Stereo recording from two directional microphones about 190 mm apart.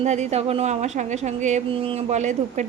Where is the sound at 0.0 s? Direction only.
35° right (ahead or behind).